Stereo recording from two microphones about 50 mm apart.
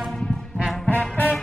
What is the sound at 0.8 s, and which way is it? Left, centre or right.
Music, left.